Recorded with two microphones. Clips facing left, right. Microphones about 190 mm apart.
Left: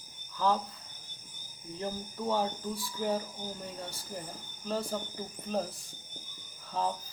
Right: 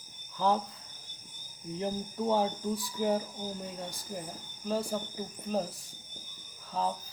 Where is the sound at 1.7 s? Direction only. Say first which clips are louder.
Right 3 dB; 20° right (ahead or behind).